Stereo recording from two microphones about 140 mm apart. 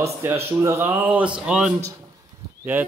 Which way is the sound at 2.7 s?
15° right (ahead or behind).